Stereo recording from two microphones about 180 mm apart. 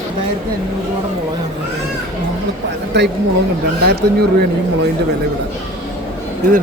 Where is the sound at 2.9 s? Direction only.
70° right (ahead or behind).